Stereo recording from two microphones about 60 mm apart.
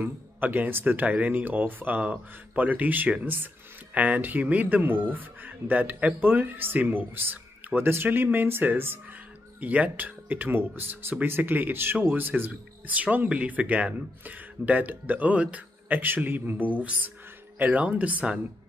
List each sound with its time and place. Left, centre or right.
0.0 s speech: right
9.6 s speech: right